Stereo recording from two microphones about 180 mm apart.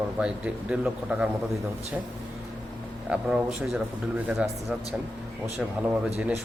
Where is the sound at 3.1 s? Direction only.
5° right (ahead or behind).